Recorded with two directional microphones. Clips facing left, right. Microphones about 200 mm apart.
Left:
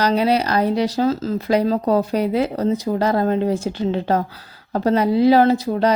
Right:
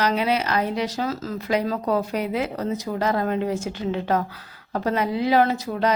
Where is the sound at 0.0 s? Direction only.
35° left (ahead or behind).